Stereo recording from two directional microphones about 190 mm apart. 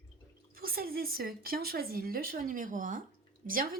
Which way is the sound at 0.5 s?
50° right (ahead or behind).